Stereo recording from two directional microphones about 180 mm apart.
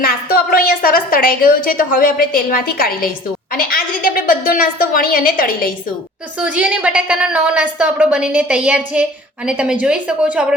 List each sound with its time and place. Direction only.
0.0 s a woman's voice: 55° left (ahead or behind)
6.4 s a woman's voice: 5° right (ahead or behind)